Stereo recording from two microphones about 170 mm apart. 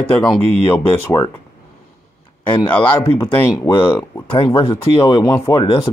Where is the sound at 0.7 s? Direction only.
15° left (ahead or behind).